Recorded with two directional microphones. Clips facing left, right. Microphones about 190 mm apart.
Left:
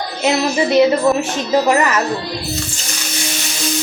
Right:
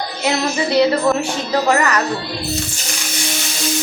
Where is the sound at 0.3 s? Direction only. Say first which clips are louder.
Left 3 dB; 20° left (ahead or behind).